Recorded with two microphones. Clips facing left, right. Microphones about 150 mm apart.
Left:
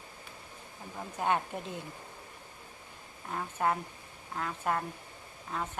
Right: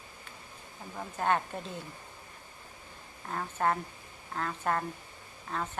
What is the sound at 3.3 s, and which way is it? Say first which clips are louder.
A woman's voice: right 1 dB; 10° left (ahead or behind).